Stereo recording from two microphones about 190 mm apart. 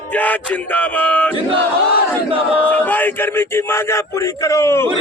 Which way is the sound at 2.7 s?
10° left (ahead or behind).